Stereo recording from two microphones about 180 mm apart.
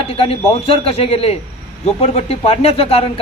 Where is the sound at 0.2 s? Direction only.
35° left (ahead or behind).